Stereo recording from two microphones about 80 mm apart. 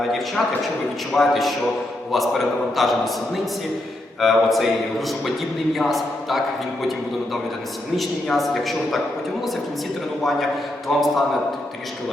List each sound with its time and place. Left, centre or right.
1.1 s a man's voice: centre
4.2 s a man's voice: centre
7.9 s a man's voice: centre
10.2 s a man's voice: centre